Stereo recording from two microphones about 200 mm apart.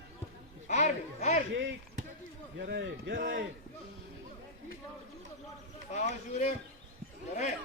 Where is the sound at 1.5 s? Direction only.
65° right (ahead or behind).